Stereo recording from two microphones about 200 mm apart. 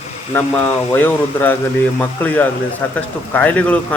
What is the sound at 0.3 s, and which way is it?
Speech, 10° left (ahead or behind).